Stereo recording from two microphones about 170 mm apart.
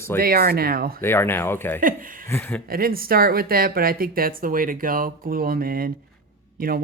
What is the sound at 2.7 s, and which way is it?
Speech, 60° right (ahead or behind).